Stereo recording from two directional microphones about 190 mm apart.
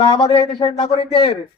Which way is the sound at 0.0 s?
25° left (ahead or behind).